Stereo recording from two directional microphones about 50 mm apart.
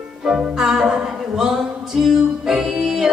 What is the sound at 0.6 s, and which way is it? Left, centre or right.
Music, centre.